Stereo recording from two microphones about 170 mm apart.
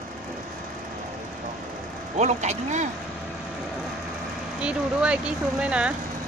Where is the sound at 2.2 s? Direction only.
45° right (ahead or behind).